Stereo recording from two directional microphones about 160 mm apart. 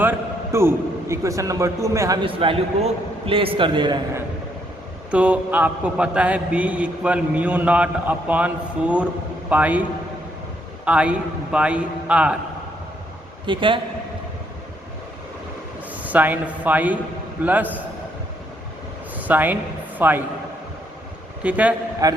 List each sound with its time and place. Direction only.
0.0 s a man's voice: 15° right (ahead or behind)
2.2 s a man's voice: 35° right (ahead or behind)
5.1 s a man's voice: 10° right (ahead or behind)
10.8 s a man's voice: 10° right (ahead or behind)
13.4 s a man's voice: 30° right (ahead or behind)
15.9 s a man's voice: 10° right (ahead or behind)
19.1 s a sound: 10° right (ahead or behind)
20.0 s a man's voice: 10° right (ahead or behind)
21.4 s a man's voice: 10° right (ahead or behind)
22.0 s a man's voice: 25° right (ahead or behind)